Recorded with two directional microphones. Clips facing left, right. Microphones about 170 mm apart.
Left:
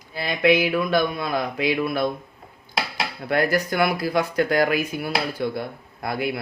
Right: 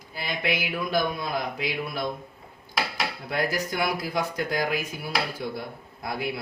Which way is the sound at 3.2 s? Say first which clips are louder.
Left 8 dB; 65° left (ahead or behind).